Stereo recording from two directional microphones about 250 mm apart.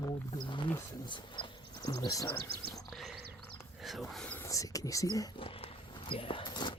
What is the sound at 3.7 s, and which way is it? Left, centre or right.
Whispering, centre.